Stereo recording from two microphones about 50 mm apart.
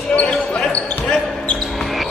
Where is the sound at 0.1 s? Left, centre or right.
Left.